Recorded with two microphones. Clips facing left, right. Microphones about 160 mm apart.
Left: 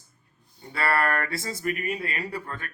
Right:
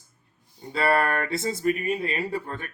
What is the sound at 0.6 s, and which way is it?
Speech, 20° right (ahead or behind).